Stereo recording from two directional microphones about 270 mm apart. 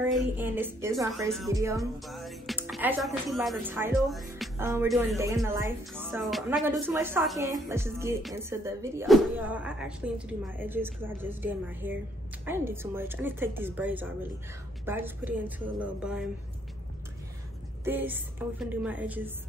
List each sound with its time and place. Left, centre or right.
0.0 s speech: centre
2.0 s speech: centre
6.1 s speech: centre
17.8 s speech: centre